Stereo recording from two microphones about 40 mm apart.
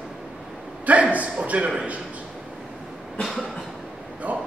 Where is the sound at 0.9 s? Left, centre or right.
Right.